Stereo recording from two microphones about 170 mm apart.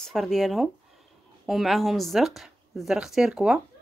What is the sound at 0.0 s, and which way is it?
Speech, centre (ahead or behind).